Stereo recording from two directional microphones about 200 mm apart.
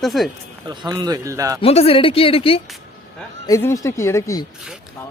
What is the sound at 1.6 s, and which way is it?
Speech, 30° left (ahead or behind).